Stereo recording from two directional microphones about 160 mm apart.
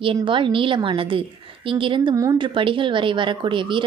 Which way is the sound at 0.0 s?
30° right (ahead or behind).